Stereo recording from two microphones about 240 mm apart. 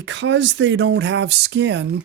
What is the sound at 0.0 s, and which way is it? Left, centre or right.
Speech, right.